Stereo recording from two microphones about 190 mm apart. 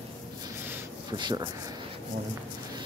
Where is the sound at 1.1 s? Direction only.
20° right (ahead or behind).